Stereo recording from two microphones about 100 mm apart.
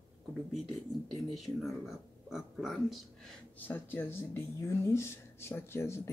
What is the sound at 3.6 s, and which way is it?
Speech, 20° left (ahead or behind).